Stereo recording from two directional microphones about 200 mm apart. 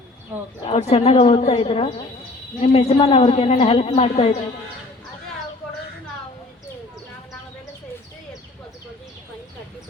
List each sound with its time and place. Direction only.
0.7 s a woman's voice: 30° left (ahead or behind)